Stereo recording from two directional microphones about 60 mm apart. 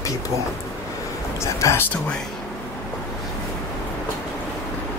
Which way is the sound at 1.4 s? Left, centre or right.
Left.